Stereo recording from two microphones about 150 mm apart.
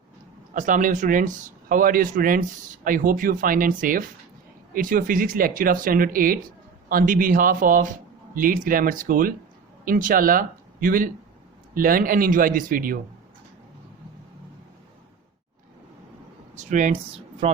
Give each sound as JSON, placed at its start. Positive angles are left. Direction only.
{"t": 0.5, "sound": "speech", "side_deg": -60}
{"t": 16.6, "sound": "speech", "side_deg": -55}
{"t": 17.4, "sound": "speech", "side_deg": -45}